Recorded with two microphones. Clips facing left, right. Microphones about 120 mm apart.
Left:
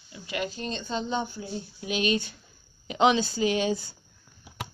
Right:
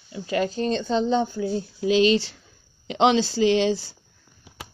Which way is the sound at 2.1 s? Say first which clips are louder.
Right 6 dB; 90° right.